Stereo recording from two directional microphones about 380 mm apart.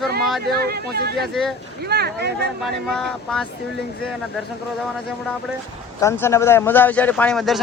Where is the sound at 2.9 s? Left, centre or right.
Centre.